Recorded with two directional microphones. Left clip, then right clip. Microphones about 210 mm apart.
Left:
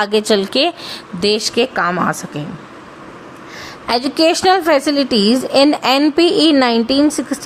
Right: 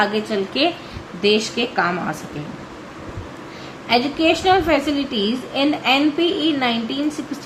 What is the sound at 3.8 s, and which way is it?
A woman's voice, 55° left (ahead or behind).